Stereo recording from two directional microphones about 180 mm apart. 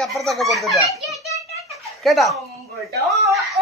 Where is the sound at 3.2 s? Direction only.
Centre (ahead or behind).